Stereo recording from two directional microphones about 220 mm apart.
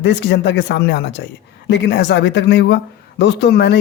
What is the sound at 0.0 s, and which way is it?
Speech, 50° left (ahead or behind).